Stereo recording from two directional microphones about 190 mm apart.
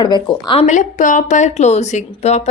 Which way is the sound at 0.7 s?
40° left (ahead or behind).